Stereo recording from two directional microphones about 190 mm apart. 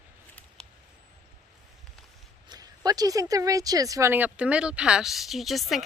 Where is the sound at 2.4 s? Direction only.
20° right (ahead or behind).